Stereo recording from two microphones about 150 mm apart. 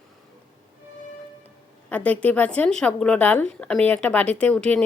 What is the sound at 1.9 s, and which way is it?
A woman's voice, 10° left (ahead or behind).